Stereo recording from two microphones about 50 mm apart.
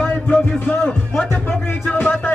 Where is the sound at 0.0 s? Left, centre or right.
Left.